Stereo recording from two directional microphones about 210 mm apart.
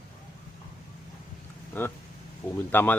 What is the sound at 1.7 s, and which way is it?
Speech, 10° left (ahead or behind).